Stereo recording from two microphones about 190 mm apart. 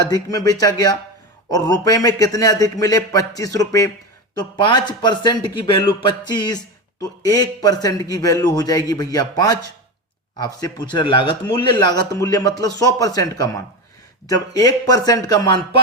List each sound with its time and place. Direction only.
0.1 s a man's voice: 20° left (ahead or behind)